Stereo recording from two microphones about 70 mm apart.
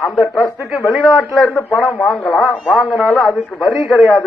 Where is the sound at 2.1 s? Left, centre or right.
Centre.